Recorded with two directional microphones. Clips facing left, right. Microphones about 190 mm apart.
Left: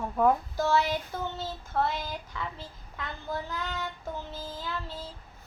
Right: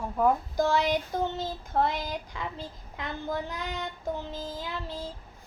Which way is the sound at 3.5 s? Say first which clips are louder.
Even; 15° right (ahead or behind).